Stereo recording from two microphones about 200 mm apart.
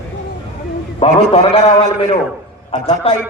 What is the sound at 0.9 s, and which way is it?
A man's voice, 30° left (ahead or behind).